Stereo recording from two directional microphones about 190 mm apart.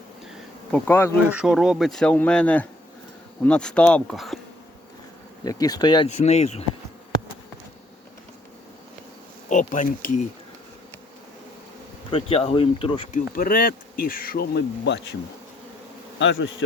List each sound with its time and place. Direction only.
0.7 s bee: 10° left (ahead or behind)
1.4 s speech: centre (ahead or behind)
5.5 s speech: 20° left (ahead or behind)
6.1 s speech: 35° left (ahead or behind)
9.5 s speech: 40° left (ahead or behind)
12.1 s speech: 30° left (ahead or behind)
13.1 s speech: 50° left (ahead or behind)
16.1 s bee: 70° left (ahead or behind)